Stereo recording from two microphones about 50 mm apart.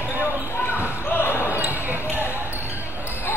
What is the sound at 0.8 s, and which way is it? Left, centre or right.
Basketball bounce, left.